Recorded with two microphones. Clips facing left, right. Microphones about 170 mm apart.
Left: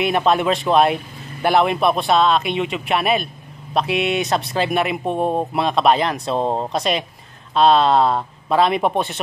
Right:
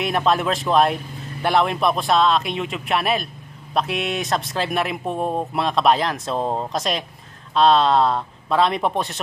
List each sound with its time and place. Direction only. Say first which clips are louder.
0.0 s a man's voice: left 3 dB; centre (ahead or behind)
6.4 s speech: left 2 dB; 25° left (ahead or behind)
6.7 s a man's voice: left 3 dB; centre (ahead or behind)